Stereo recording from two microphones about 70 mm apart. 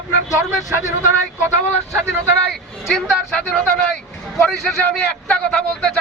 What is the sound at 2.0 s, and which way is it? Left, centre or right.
Speech, right.